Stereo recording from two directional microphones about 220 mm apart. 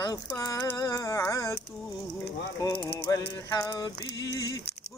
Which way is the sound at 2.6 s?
15° left (ahead or behind).